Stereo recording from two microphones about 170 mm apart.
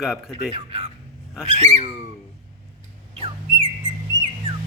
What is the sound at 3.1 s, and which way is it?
Bird, 35° right (ahead or behind).